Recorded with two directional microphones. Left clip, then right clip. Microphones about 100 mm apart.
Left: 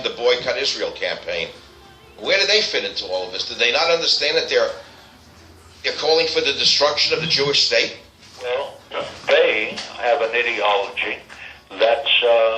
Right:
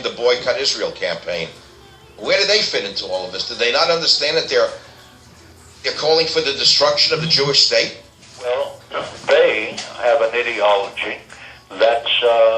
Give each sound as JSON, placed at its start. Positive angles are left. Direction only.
{"t": 0.0, "sound": "a man's voice", "side_deg": -35}
{"t": 5.8, "sound": "a man's voice", "side_deg": -35}
{"t": 8.4, "sound": "a sound", "side_deg": -30}
{"t": 11.7, "sound": "a man's voice", "side_deg": -30}